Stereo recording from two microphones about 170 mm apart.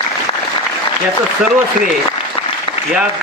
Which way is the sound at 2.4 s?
30° left (ahead or behind).